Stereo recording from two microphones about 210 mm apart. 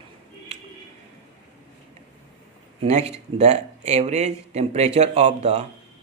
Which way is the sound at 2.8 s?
30° right (ahead or behind).